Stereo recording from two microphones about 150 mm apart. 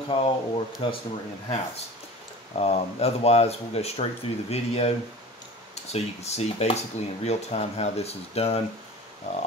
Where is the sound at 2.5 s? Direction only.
45° left (ahead or behind).